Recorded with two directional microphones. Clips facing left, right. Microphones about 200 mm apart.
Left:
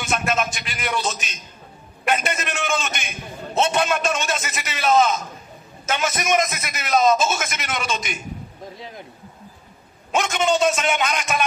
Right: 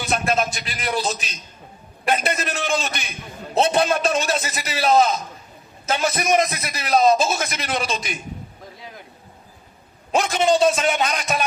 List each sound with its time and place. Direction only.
0.0 s a sound: 35° right (ahead or behind)
2.0 s a man's voice: 35° right (ahead or behind)
10.1 s a man's voice: 35° right (ahead or behind)